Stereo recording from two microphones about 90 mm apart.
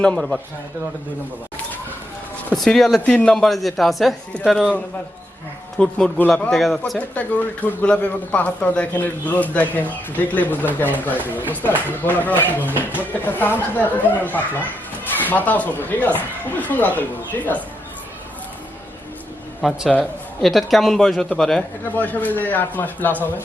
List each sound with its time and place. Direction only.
0.0 s a man's voice: 5° left (ahead or behind)
2.6 s a man's voice: 5° left (ahead or behind)
3.1 s a man's voice: 15° left (ahead or behind)
3.3 s a man's voice: centre (ahead or behind)
5.7 s a man's voice: 10° left (ahead or behind)
6.5 s a man's voice: centre (ahead or behind)
7.1 s a man's voice: 15° left (ahead or behind)
19.6 s a man's voice: 5° right (ahead or behind)
21.9 s speech: 20° left (ahead or behind)